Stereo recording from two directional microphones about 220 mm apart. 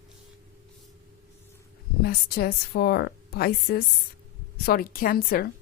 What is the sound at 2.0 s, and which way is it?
A woman's voice, 45° left (ahead or behind).